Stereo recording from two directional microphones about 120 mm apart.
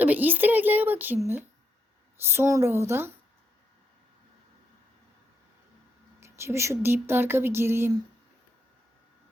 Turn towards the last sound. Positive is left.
turn(degrees=-20)  # may be behind; listen again after turning